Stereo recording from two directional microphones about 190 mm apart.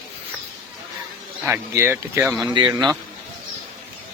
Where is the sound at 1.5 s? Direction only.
10° right (ahead or behind).